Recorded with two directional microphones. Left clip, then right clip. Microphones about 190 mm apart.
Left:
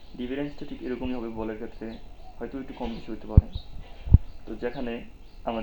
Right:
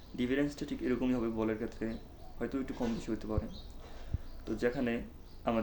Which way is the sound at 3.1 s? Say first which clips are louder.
Even; 30° right (ahead or behind).